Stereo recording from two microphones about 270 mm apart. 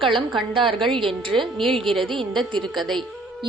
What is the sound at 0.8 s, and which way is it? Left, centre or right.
A woman's voice, centre.